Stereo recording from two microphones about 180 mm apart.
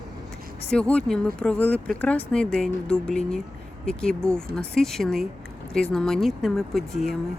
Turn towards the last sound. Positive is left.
turn(degrees=0)  # may be behind; listen again after turning